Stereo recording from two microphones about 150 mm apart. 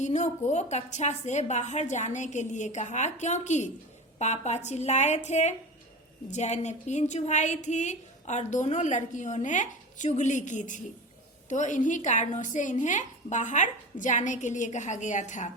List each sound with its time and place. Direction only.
0.0 s a woman's voice: 50° left (ahead or behind)